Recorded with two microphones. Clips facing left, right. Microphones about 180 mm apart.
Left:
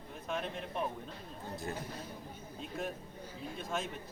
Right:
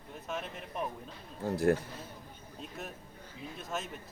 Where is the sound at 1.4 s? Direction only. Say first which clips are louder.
Right 13 dB; 90° right.